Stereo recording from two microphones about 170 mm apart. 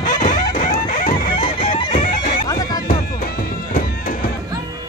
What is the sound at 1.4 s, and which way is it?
Chicken, 30° left (ahead or behind).